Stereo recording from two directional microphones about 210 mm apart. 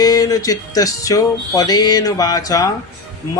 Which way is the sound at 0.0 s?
20° left (ahead or behind).